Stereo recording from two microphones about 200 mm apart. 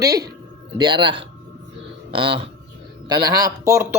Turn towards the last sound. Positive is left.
turn(degrees=-15)  # may be behind; listen again after turning